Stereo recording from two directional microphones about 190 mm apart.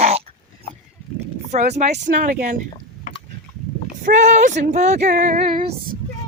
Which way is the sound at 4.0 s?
45° right (ahead or behind).